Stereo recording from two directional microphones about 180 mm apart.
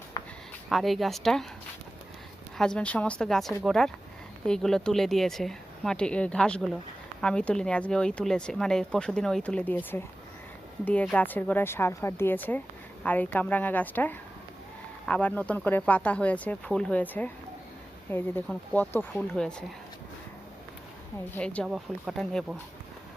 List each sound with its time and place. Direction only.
0.1 s a sound: 20° left (ahead or behind)
0.7 s speech: centre (ahead or behind)
2.6 s a woman's voice: 5° left (ahead or behind)
21.2 s speech: 10° left (ahead or behind)